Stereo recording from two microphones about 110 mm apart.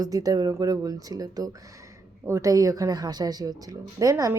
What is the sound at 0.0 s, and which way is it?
Speech, 35° right (ahead or behind).